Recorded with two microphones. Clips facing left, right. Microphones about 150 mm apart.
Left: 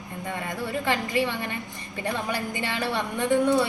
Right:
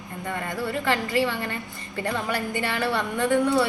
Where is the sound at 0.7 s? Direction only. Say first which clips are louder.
Right 1 dB; 15° left (ahead or behind).